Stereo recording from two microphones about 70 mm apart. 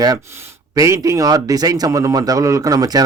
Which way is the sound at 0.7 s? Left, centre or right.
Right.